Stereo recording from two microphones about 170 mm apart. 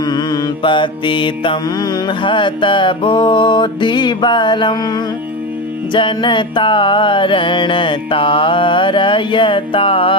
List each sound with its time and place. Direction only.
0.0 s mantra: 25° left (ahead or behind)